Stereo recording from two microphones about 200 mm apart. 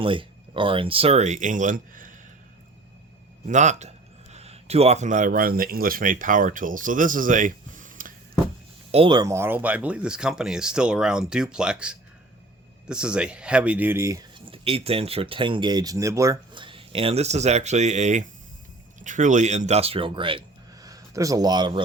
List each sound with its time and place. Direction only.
0.0 s speech: 25° right (ahead or behind); by 2.1 s 40° right (ahead or behind)
3.4 s speech: 35° right (ahead or behind)
8.9 s speech: 25° right (ahead or behind)